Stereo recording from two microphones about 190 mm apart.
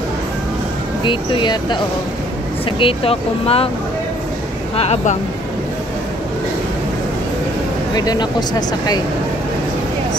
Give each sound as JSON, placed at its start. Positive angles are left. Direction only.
{"t": 1.0, "sound": "speech", "side_deg": 25}
{"t": 2.8, "sound": "speech", "side_deg": 30}
{"t": 4.7, "sound": "speech", "side_deg": 35}
{"t": 7.9, "sound": "speech", "side_deg": 20}